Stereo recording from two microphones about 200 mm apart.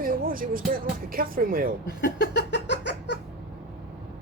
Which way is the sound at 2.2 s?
60° left (ahead or behind).